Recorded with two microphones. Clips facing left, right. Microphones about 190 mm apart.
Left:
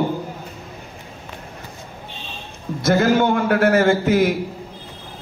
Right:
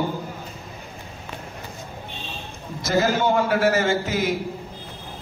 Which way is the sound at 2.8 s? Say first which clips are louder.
Left 5 dB; 55° left (ahead or behind).